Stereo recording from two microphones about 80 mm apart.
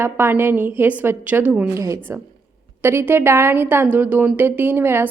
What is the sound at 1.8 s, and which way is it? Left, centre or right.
A woman's voice, right.